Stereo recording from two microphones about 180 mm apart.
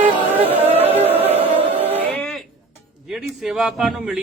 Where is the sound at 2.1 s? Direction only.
5° left (ahead or behind).